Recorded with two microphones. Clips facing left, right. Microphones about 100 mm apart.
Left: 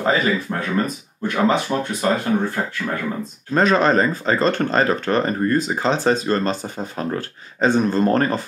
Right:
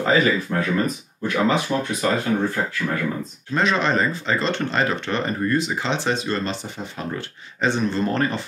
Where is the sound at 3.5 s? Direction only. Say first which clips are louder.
Left 5 dB; 40° left (ahead or behind).